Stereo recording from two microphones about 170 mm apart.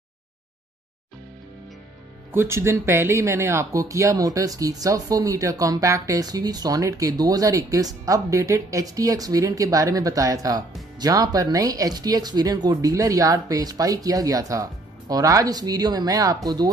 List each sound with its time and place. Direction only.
2.3 s speech: 15° right (ahead or behind)